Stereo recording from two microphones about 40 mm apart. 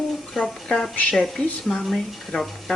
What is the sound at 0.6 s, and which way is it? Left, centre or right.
Speech, centre.